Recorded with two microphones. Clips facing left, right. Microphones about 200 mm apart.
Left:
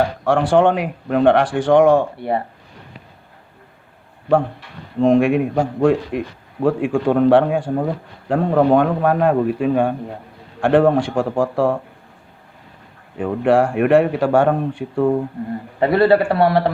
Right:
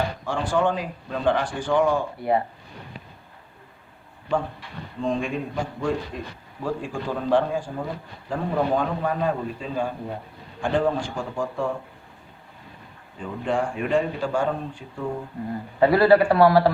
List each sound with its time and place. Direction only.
0.3 s speech: 75° left (ahead or behind)
4.9 s speech: 70° left (ahead or behind)
13.1 s speech: 65° left (ahead or behind)
15.9 s a man's voice: 25° left (ahead or behind)